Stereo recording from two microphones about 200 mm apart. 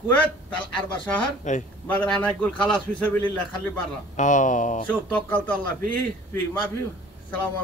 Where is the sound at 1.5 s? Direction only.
35° left (ahead or behind).